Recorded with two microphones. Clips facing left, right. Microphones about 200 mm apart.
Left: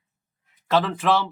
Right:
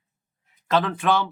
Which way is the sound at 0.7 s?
Centre (ahead or behind).